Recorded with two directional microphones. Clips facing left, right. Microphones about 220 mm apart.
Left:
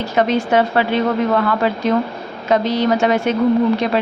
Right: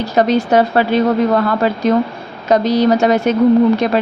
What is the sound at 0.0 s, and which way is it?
A woman's voice, 40° right (ahead or behind).